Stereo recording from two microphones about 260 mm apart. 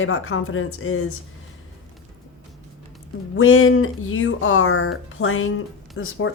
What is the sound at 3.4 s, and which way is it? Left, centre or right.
A woman's voice, left.